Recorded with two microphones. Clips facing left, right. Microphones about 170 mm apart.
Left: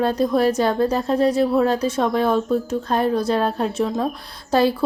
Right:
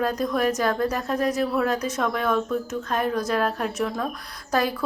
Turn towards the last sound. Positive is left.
turn(degrees=30)  # may be behind; listen again after turning